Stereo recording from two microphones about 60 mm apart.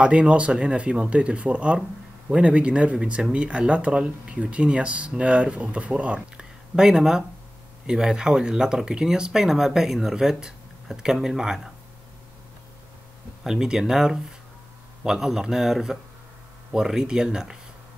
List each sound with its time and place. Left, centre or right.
0.0 s speech: centre
6.7 s speech: centre
13.4 s a man's voice: centre